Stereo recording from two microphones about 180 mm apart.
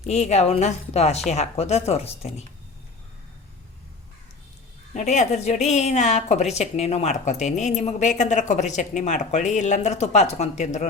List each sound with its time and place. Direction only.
0.0 s a woman's voice: 40° left (ahead or behind)
4.9 s a woman's voice: 40° left (ahead or behind)